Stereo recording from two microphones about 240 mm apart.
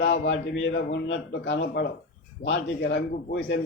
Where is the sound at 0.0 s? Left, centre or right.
Left.